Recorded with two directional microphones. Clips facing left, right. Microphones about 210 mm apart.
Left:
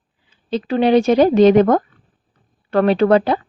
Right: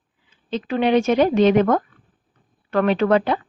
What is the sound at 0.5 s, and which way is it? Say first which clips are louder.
A woman's voice: left 4 dB; 35° left (ahead or behind).